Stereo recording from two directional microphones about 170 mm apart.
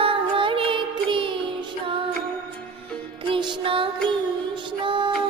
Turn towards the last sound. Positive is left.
turn(degrees=-30)  # may be behind; listen again after turning